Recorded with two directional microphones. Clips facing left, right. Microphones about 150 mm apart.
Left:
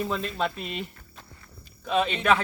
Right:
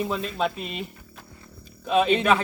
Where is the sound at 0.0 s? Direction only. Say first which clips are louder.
Right 2 dB; 5° right (ahead or behind).